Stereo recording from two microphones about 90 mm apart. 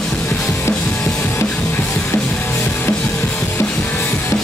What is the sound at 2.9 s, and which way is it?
Music, 15° left (ahead or behind).